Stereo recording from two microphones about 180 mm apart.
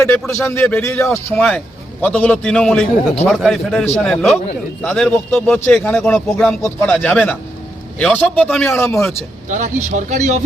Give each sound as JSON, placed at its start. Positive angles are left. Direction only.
{"t": 0.0, "sound": "a man's voice", "side_deg": 5}
{"t": 9.5, "sound": "speech", "side_deg": -45}